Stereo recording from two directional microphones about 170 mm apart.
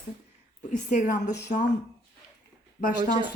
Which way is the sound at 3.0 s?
25° right (ahead or behind).